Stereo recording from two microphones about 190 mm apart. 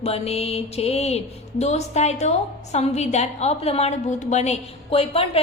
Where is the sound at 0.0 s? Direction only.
30° left (ahead or behind).